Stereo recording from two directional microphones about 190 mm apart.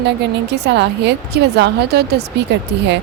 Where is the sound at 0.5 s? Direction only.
65° right (ahead or behind).